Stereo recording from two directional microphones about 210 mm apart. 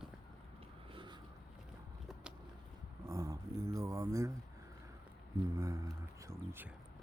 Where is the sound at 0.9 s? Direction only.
25° right (ahead or behind).